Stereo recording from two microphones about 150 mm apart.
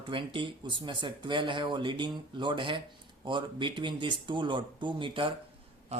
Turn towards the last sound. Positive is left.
turn(degrees=-35)  # may be behind; listen again after turning